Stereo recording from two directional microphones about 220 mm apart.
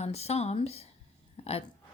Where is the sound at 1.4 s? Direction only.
30° left (ahead or behind).